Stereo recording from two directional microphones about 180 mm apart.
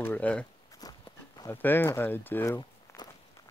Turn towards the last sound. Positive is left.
turn(degrees=15)  # may be behind; listen again after turning